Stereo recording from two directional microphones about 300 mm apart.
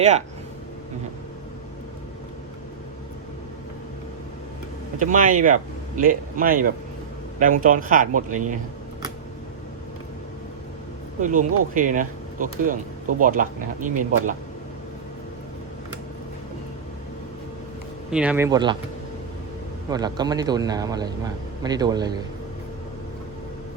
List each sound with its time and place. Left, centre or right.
4.9 s speech: right
11.2 s speech: right
18.1 s a man's voice: centre
19.9 s a man's voice: centre